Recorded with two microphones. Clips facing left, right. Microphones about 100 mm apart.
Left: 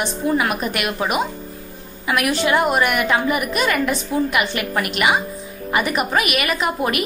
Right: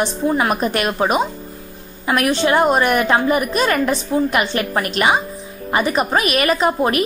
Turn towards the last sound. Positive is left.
turn(degrees=-35)  # may be behind; listen again after turning